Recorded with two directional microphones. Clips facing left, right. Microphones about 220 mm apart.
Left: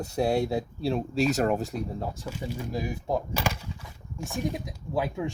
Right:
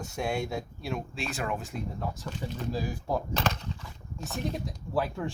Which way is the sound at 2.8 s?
20° left (ahead or behind).